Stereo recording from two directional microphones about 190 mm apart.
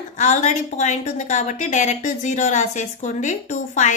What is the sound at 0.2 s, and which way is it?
Speech, 40° left (ahead or behind).